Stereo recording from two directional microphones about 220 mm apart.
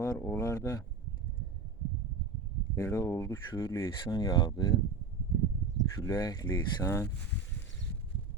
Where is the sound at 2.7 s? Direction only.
15° left (ahead or behind).